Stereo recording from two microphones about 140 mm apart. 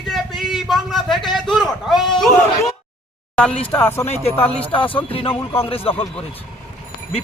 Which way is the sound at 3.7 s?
15° left (ahead or behind).